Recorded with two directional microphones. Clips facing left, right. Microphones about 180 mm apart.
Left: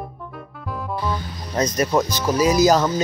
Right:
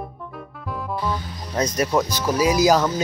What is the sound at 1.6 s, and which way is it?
Speech, 10° right (ahead or behind).